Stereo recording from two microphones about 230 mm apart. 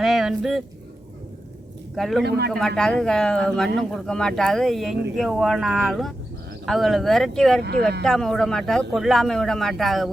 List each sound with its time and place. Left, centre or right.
0.0 s a sound: centre
2.0 s speech: centre
2.2 s speech: right
2.5 s speech: centre
7.6 s speech: right
8.0 s speech: centre